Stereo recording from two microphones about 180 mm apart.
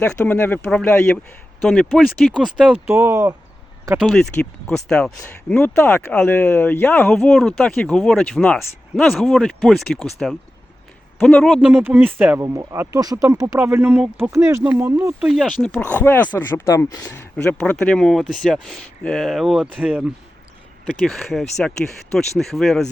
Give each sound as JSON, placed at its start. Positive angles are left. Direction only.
{"t": 0.0, "sound": "speech", "side_deg": 10}
{"t": 2.8, "sound": "speech", "side_deg": -15}
{"t": 4.0, "sound": "speech", "side_deg": 5}
{"t": 21.1, "sound": "speech", "side_deg": 0}